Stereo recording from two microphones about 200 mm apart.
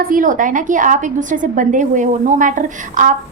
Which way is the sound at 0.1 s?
40° right (ahead or behind).